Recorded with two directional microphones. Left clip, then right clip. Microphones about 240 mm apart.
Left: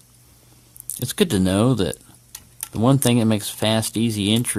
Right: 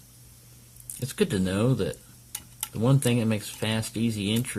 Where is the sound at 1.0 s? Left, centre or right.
Left.